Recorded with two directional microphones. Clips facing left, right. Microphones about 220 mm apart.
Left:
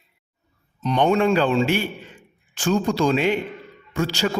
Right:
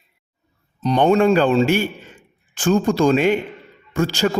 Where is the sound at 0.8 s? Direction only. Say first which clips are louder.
Right 4 dB; 35° right (ahead or behind).